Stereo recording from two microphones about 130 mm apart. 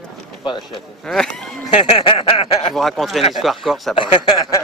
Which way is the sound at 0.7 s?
Centre (ahead or behind).